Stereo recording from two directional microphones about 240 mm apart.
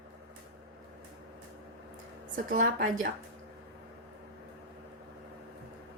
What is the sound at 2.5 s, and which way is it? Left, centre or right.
Speech, right.